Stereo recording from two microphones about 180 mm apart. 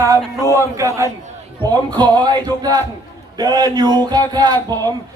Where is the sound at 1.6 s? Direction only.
20° right (ahead or behind).